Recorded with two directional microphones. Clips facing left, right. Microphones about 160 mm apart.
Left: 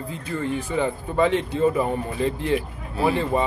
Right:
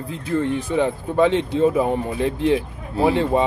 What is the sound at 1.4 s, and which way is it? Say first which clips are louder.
Speech: right 4 dB; 90° right.